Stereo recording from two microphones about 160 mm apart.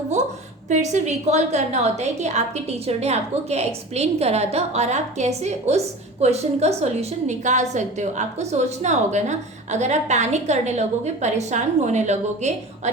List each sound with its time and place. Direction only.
0.7 s a woman's voice: 45° right (ahead or behind)